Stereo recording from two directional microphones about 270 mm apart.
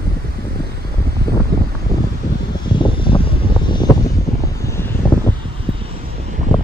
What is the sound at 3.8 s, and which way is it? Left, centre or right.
Wind noise, centre.